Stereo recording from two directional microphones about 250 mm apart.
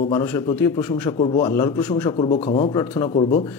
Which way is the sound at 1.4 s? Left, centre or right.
Centre.